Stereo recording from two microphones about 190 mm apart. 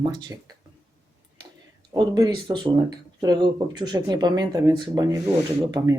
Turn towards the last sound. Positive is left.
turn(degrees=-15)  # may be behind; listen again after turning